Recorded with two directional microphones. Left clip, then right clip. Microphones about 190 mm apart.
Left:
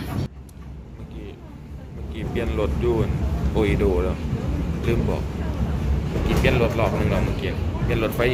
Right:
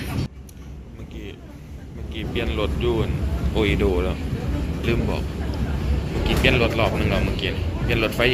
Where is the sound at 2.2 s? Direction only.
5° left (ahead or behind).